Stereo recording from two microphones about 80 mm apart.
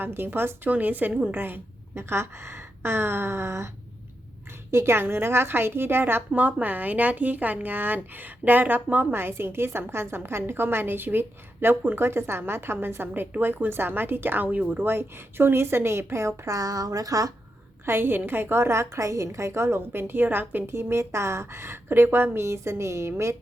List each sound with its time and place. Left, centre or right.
0.0 s speech: right
4.7 s speech: right
17.8 s a woman's voice: right